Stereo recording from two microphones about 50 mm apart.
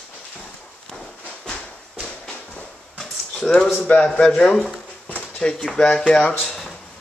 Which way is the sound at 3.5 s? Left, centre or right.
Centre.